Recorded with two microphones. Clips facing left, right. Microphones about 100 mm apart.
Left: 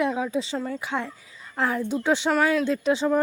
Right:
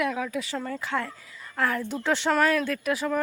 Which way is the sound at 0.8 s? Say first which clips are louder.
Even; 20° left (ahead or behind).